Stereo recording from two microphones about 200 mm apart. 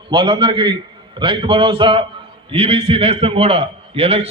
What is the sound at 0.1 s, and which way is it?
A man's voice, 25° right (ahead or behind).